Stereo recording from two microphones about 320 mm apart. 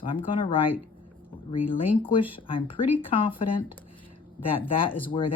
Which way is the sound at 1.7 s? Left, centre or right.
Centre.